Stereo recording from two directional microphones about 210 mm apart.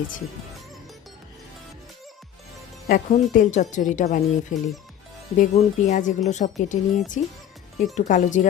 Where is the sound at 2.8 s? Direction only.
40° left (ahead or behind).